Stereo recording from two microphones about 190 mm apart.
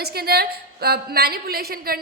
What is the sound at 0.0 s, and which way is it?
A woman's voice, 55° right (ahead or behind).